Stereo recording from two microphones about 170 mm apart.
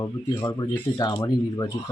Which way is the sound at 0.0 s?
20° left (ahead or behind).